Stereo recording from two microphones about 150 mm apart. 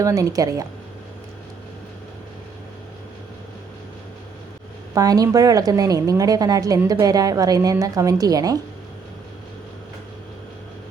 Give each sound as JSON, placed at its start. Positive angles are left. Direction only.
{"t": 0.0, "sound": "a woman's voice", "side_deg": -20}
{"t": 4.9, "sound": "a woman's voice", "side_deg": -25}